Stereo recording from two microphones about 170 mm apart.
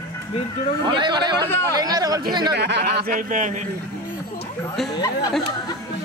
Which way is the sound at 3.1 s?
50° right (ahead or behind).